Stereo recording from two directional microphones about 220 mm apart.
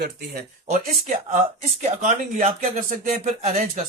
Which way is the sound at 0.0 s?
40° right (ahead or behind).